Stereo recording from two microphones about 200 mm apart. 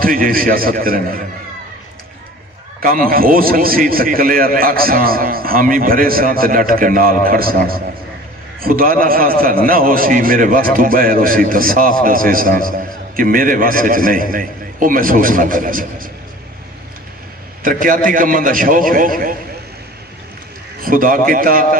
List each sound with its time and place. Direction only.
0.0 s a man's voice: 45° right (ahead or behind)
2.8 s a man's voice: 45° right (ahead or behind)
17.6 s a man's voice: 45° right (ahead or behind)
20.8 s a man's voice: 45° right (ahead or behind)